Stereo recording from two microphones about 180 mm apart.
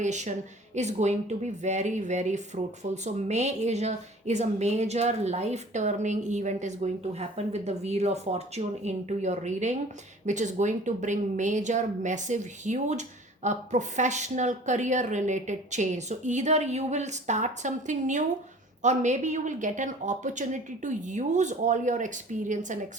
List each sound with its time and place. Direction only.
0.0 s speech: 40° right (ahead or behind)